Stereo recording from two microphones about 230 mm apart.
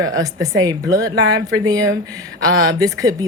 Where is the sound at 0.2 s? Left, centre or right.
Centre.